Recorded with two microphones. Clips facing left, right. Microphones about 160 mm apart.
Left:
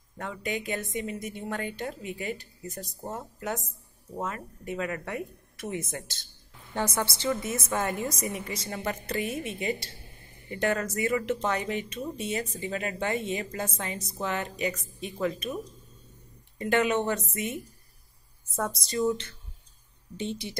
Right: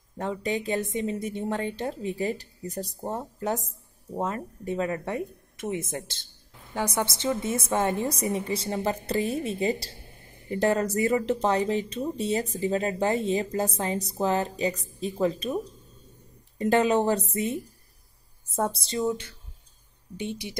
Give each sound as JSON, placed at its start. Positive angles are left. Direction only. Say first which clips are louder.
{"t": 0.2, "sound": "a woman's voice", "louder": "right 5 dB", "side_deg": -30}
{"t": 6.7, "sound": "a woman's voice", "louder": "right 2 dB", "side_deg": -15}
{"t": 18.6, "sound": "a woman's voice", "louder": "right 2 dB", "side_deg": -30}
{"t": 19.0, "sound": "speech", "louder": "even", "side_deg": -10}